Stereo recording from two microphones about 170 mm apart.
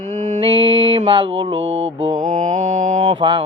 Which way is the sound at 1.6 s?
90° right.